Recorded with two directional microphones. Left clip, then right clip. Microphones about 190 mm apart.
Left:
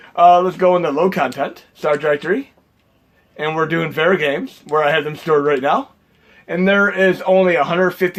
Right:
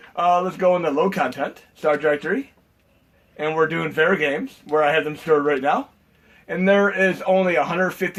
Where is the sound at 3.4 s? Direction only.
50° left (ahead or behind).